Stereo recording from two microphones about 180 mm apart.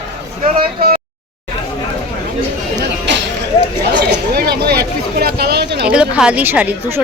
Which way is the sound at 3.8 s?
60° right (ahead or behind).